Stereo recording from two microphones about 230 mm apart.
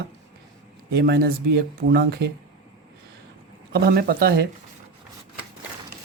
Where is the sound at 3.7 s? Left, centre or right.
Right.